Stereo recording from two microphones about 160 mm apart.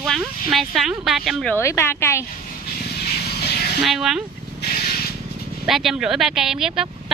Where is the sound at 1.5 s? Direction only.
15° left (ahead or behind).